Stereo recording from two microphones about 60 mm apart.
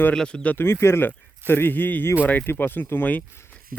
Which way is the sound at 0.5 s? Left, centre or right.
Left.